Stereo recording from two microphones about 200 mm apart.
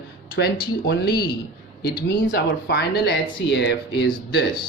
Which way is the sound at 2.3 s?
60° left (ahead or behind).